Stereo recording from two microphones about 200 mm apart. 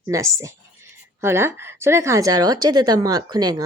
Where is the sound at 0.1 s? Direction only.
15° right (ahead or behind).